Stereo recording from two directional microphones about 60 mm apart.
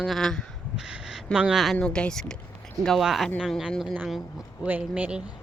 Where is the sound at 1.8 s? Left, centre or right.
Centre.